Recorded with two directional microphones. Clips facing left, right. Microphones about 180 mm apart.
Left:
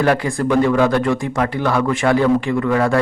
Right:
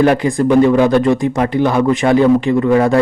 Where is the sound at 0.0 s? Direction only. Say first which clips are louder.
Right 5 dB; 20° right (ahead or behind).